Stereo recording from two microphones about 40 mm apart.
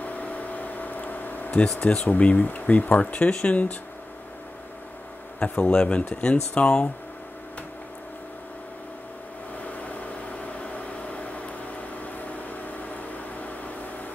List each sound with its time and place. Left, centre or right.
0.0 s a sound: left
1.8 s speech: left
2.0 s speech: left
3.3 s speech: left
5.4 s speech: left
9.7 s a sound: left